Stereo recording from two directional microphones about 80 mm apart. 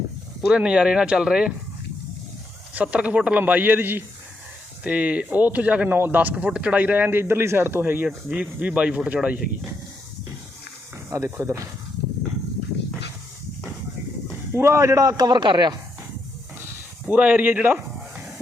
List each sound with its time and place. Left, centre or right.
0.4 s speech: centre
2.7 s speech: centre
8.4 s speech: centre
11.1 s speech: right
14.5 s a man's voice: right
17.1 s speech: right